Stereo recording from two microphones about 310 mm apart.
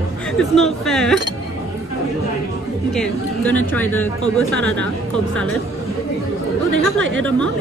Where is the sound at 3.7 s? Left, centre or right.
Centre.